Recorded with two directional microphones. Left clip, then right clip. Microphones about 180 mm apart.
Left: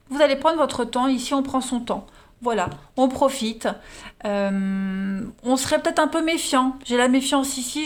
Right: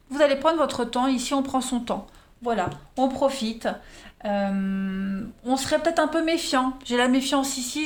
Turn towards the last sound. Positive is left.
turn(degrees=25)  # may be behind; listen again after turning